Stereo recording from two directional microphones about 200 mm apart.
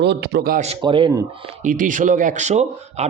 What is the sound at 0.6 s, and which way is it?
Speech, 25° right (ahead or behind).